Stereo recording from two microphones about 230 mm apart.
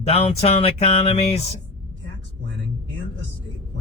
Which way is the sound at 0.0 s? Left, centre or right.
Left.